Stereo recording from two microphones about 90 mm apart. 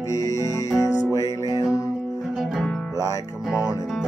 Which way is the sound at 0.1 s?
35° left (ahead or behind).